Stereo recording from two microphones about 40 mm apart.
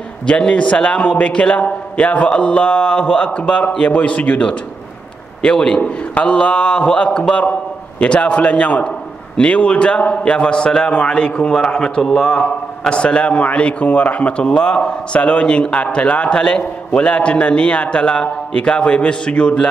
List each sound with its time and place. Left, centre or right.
0.3 s a man's voice: left
12.0 s a man's voice: centre
12.3 s a man's voice: left